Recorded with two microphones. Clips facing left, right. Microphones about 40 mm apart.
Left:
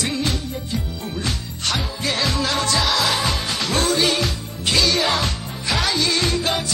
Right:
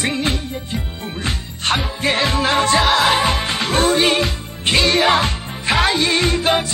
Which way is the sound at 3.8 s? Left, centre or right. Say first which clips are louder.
Right 4 dB; centre.